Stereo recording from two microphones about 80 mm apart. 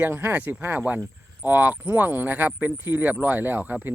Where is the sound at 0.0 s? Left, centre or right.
Right.